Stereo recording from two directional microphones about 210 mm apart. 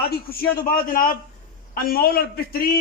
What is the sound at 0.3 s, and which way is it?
A man's voice, 45° left (ahead or behind).